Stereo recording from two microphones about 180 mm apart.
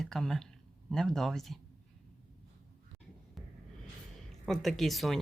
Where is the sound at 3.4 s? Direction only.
Centre (ahead or behind).